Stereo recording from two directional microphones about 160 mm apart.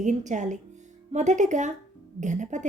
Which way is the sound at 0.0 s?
50° right (ahead or behind).